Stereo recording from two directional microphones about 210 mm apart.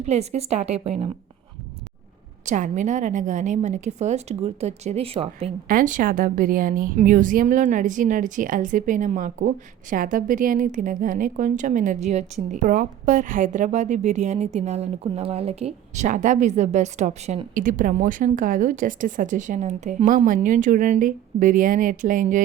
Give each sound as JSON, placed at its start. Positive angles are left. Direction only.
{"t": 0.0, "sound": "a woman's voice", "side_deg": -30}
{"t": 2.5, "sound": "a woman's voice", "side_deg": -35}
{"t": 5.6, "sound": "a woman's voice", "side_deg": -40}